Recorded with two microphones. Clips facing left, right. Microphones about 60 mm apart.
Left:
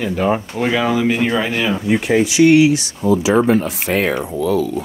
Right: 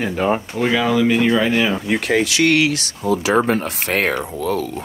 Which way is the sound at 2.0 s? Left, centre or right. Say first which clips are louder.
Left 5 dB; right.